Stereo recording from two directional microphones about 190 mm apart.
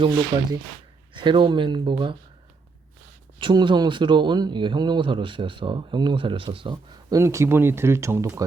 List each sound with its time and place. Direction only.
0.3 s speech: 30° right (ahead or behind)
3.3 s speech: 25° right (ahead or behind)